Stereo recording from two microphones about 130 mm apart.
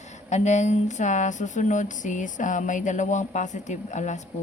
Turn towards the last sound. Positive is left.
turn(degrees=70)  # may be behind; listen again after turning